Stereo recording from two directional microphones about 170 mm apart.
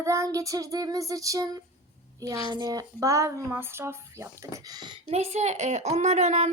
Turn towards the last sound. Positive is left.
turn(degrees=-40)  # may be behind; listen again after turning